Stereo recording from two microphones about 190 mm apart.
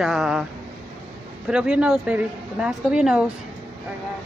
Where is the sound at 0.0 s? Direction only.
Centre (ahead or behind).